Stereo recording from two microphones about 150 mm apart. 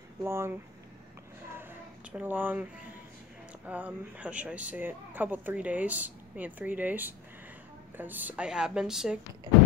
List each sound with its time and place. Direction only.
0.2 s speech: 15° right (ahead or behind)
1.6 s a sound: 15° right (ahead or behind)
3.6 s a woman's voice: 10° right (ahead or behind)